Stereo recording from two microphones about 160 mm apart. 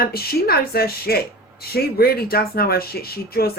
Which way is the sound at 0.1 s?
75° left (ahead or behind).